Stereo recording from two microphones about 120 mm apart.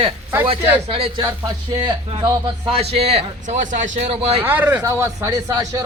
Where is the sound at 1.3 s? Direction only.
35° right (ahead or behind).